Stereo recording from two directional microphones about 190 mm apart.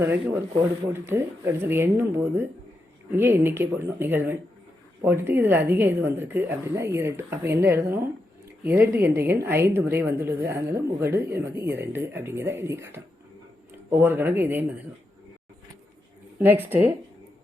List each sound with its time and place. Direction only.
0.0 s a woman's voice: 10° right (ahead or behind)
16.4 s a woman's voice: 10° right (ahead or behind)